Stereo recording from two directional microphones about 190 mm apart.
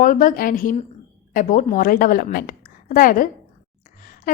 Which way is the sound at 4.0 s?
45° left (ahead or behind).